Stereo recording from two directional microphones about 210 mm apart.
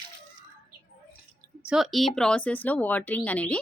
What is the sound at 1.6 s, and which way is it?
A woman's voice, centre (ahead or behind).